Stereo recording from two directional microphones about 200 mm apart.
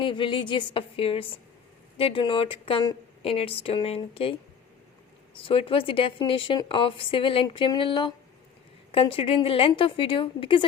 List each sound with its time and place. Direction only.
0.0 s speech: 25° left (ahead or behind)